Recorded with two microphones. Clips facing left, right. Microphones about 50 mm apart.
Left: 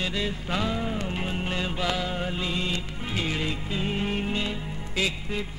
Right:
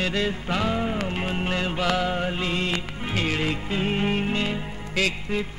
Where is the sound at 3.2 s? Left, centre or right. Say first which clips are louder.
Right 4 dB; right.